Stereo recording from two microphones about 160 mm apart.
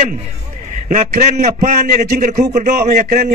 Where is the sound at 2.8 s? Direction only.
60° right (ahead or behind).